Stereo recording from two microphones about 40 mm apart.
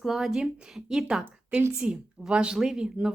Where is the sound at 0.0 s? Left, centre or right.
Centre.